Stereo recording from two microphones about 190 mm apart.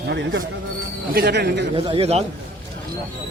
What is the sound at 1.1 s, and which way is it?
Speech, 55° right (ahead or behind).